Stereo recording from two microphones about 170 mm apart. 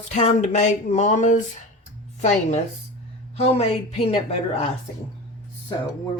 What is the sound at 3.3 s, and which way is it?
Speech, 35° left (ahead or behind).